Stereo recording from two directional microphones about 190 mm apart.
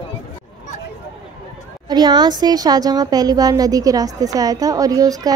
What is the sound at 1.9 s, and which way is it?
A woman's voice, 20° right (ahead or behind).